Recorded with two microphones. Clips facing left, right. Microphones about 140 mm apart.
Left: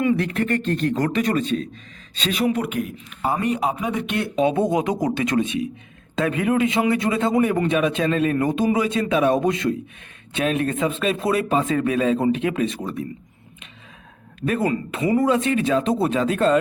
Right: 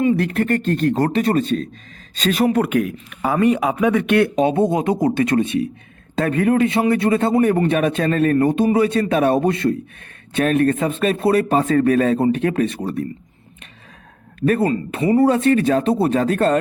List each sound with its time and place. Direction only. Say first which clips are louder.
0.1 s a man's voice: right 3 dB; 40° right (ahead or behind); by 4.3 s 60° right (ahead or behind)
4.4 s speech: right 2 dB; 35° right (ahead or behind)
4.6 s speech: right 3 dB; 25° right (ahead or behind)
5.0 s speech: right 4 dB; 45° right (ahead or behind)
7.3 s speech: right 1 dB; 35° right (ahead or behind)
8.4 s speech: right 4 dB; 35° right (ahead or behind)
8.8 s speech: right 3 dB; 45° right (ahead or behind)
10.3 s speech: right 5 dB; 50° right (ahead or behind)
14.6 s speech: right 3 dB; 30° right (ahead or behind)
15.3 s speech: right 4 dB; 45° right (ahead or behind)